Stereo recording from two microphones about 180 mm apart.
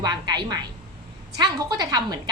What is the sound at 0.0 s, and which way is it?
A woman's voice, 25° right (ahead or behind).